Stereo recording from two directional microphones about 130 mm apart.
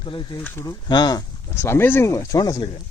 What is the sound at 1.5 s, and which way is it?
Speech, 20° left (ahead or behind).